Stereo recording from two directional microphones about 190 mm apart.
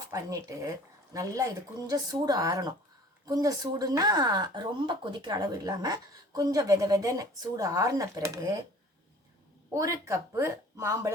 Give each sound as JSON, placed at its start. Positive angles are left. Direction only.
{"t": 0.1, "sound": "speech", "side_deg": -15}
{"t": 9.7, "sound": "speech", "side_deg": -15}